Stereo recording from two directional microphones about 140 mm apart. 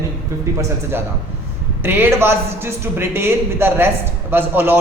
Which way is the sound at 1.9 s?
15° right (ahead or behind).